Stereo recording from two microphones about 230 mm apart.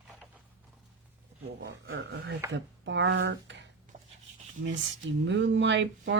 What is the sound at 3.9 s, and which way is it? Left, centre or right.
Writing, right.